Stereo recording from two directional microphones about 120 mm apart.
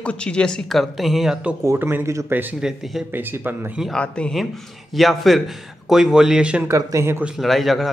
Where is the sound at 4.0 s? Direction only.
10° left (ahead or behind); by 6.7 s 10° right (ahead or behind).